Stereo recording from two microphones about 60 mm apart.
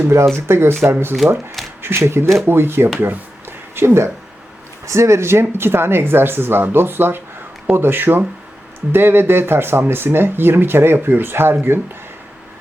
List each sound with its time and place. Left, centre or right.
0.0 s speech: right